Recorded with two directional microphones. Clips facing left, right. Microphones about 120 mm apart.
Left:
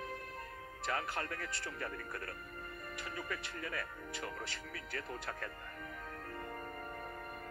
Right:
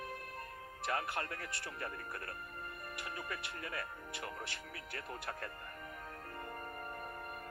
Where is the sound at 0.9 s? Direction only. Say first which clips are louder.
Even; 25° right (ahead or behind).